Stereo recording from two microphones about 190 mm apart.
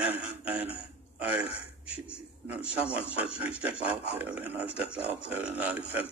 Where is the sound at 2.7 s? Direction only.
5° right (ahead or behind).